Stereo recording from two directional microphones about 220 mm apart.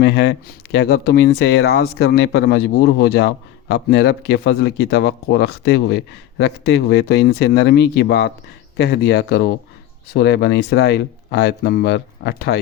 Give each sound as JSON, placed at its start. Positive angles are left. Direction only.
{"t": 0.0, "sound": "speech", "side_deg": 50}